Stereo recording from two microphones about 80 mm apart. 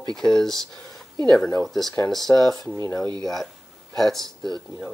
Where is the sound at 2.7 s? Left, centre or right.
Left.